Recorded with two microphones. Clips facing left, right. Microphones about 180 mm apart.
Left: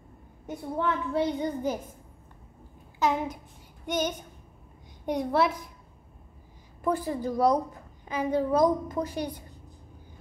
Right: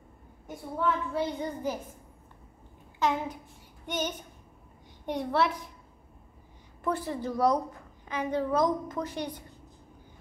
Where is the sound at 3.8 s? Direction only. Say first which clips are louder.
Left 4 dB; 10° left (ahead or behind).